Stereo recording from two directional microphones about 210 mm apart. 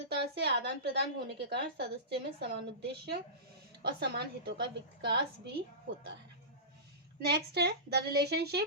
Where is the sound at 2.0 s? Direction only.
50° right (ahead or behind).